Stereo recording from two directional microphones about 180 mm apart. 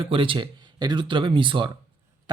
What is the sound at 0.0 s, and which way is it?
Speech, 30° right (ahead or behind).